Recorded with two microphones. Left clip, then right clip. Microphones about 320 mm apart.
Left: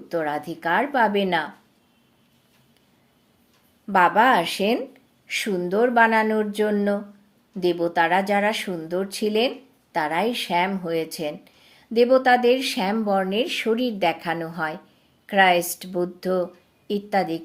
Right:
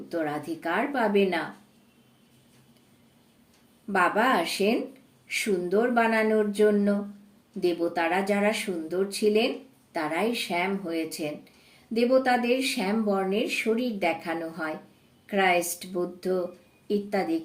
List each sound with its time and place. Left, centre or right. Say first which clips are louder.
0.1 s speech: left 5 dB; left
3.9 s speech: left 6 dB; left